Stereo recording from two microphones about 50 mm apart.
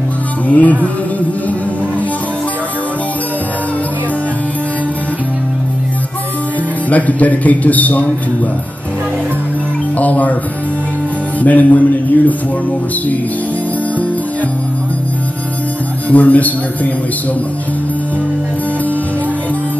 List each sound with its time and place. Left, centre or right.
0.5 s a man's voice: left
6.9 s a man's voice: left
9.9 s a man's voice: left
11.4 s a man's voice: left
16.1 s a man's voice: left